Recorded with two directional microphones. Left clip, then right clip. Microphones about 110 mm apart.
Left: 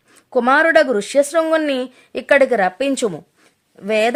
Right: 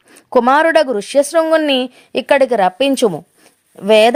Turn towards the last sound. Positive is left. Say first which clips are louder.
# right 8 dB
turn(degrees=-45)  # may be behind; listen again after turning